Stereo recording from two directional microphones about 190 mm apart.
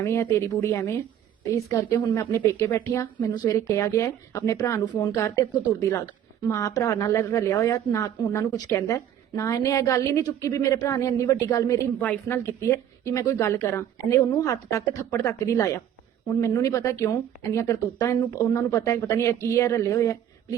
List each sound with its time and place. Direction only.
0.0 s a woman's voice: 15° left (ahead or behind)
6.5 s a woman's voice: 15° left (ahead or behind)